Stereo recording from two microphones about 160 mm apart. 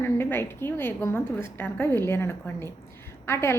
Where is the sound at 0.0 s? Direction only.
15° left (ahead or behind).